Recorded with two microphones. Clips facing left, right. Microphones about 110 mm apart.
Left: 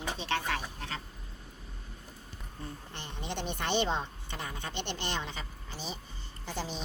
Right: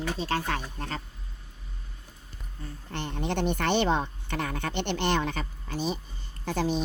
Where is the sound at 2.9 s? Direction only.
60° right (ahead or behind).